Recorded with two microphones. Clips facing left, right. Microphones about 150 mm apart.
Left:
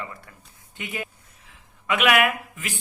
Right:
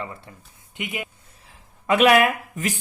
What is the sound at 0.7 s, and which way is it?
Speech, 15° right (ahead or behind).